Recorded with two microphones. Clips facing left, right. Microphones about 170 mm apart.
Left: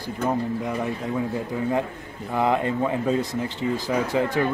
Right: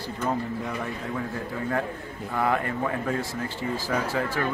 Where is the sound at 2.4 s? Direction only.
20° left (ahead or behind).